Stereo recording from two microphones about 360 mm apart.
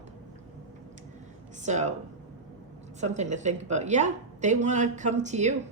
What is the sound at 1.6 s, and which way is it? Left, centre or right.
Speech, centre.